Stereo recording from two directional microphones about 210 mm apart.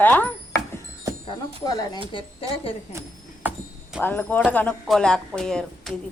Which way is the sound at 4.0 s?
10° left (ahead or behind).